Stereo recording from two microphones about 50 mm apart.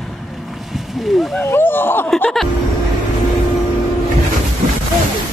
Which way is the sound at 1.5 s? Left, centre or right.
Left.